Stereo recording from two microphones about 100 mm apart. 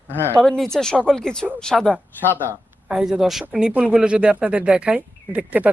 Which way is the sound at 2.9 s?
5° right (ahead or behind).